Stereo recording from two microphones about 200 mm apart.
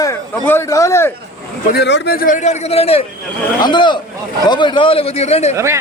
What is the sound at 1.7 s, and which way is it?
A man's voice, 55° left (ahead or behind).